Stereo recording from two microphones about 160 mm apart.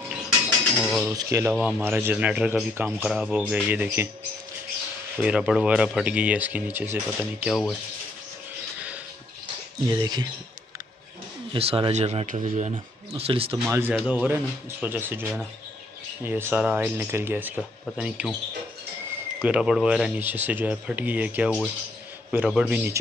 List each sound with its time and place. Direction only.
0.7 s speech: centre (ahead or behind)
1.1 s speech: 20° right (ahead or behind)
1.5 s a man's voice: 10° right (ahead or behind)
5.2 s a man's voice: 5° right (ahead or behind)
9.8 s speech: 25° right (ahead or behind)
11.5 s speech: 35° right (ahead or behind)
13.7 s a man's voice: 15° right (ahead or behind)
19.4 s a man's voice: 5° right (ahead or behind)